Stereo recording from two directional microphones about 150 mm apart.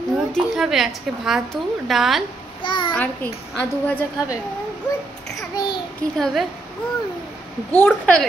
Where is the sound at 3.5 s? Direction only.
10° left (ahead or behind).